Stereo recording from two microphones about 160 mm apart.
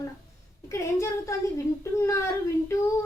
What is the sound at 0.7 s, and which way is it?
A woman's voice, 20° left (ahead or behind).